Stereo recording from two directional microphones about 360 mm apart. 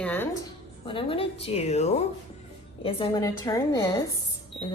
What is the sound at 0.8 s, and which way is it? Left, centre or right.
A woman's voice, centre.